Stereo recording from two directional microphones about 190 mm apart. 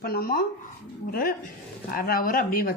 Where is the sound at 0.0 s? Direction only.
55° left (ahead or behind).